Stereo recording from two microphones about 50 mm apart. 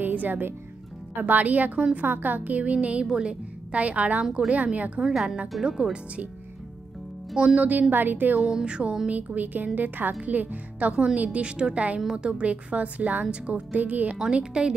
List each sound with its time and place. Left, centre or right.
0.0 s speech: right
5.0 s speech: centre
7.5 s speech: right
8.4 s speech: centre
9.0 s speech: right
14.1 s speech: centre